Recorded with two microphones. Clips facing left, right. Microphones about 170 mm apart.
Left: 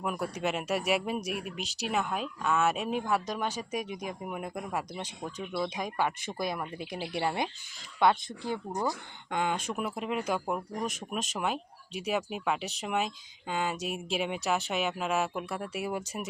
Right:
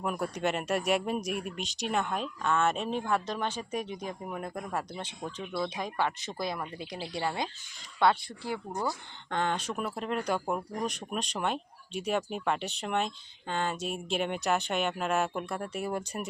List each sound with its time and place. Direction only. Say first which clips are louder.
0.0 s speech: right 1 dB; centre (ahead or behind)
7.2 s speech: left 2 dB; 20° left (ahead or behind)